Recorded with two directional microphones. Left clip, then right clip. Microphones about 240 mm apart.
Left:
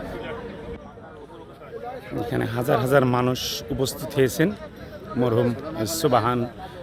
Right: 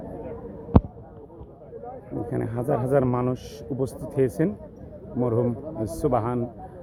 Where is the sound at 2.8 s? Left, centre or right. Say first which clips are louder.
Left 3 dB; centre.